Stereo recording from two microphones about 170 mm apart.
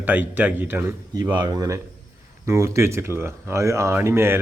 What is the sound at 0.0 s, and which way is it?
Speech, 10° right (ahead or behind).